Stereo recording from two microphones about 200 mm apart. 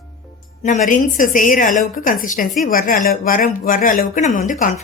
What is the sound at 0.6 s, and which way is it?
Speech, 40° left (ahead or behind).